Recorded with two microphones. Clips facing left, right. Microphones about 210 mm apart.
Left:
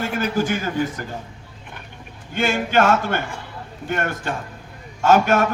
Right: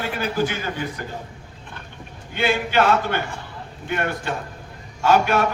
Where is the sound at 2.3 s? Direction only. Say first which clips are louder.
Left 1 dB; 50° left (ahead or behind).